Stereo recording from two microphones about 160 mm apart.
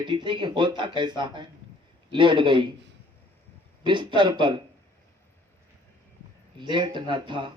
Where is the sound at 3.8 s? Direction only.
30° right (ahead or behind).